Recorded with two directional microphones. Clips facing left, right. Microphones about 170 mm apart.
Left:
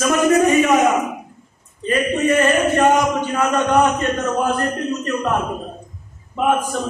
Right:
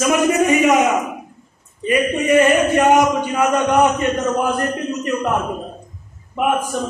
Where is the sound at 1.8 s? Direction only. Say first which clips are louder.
Right 1 dB; 15° right (ahead or behind).